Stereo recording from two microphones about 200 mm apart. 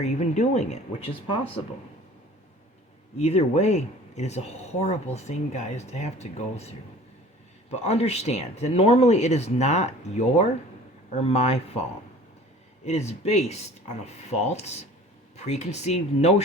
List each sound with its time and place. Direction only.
0.0 s speech: 35° left (ahead or behind)
3.2 s speech: 30° left (ahead or behind)
12.8 s speech: 35° left (ahead or behind)